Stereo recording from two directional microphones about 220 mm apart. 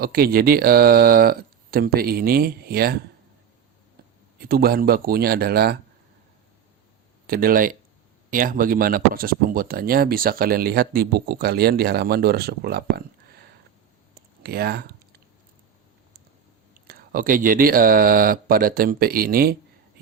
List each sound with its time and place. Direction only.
0.0 s speech: 40° right (ahead or behind)
4.4 s speech: 45° right (ahead or behind)
7.3 s speech: 40° right (ahead or behind)
14.4 s speech: 45° right (ahead or behind)
16.8 s speech: 40° right (ahead or behind)